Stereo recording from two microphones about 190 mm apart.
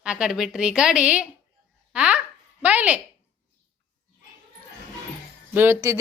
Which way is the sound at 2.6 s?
5° right (ahead or behind).